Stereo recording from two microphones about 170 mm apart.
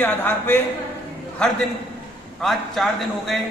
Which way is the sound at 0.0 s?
10° left (ahead or behind).